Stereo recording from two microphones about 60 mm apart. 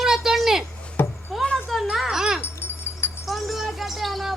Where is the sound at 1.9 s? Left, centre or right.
Centre.